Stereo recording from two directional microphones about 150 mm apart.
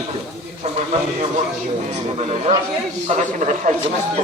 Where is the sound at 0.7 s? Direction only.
45° right (ahead or behind).